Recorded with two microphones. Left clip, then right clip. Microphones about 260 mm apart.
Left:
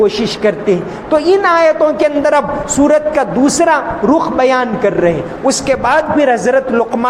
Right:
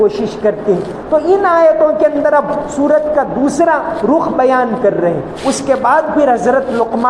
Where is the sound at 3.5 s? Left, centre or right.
Left.